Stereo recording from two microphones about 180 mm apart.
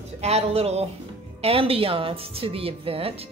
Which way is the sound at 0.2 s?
35° right (ahead or behind).